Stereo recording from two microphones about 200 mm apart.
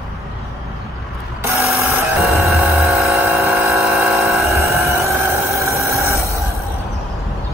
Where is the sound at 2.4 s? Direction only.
Centre (ahead or behind).